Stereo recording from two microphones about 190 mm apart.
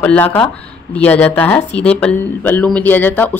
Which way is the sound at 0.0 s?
10° left (ahead or behind).